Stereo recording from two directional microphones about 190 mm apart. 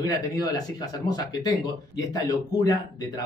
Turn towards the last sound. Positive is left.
turn(degrees=20)  # may be behind; listen again after turning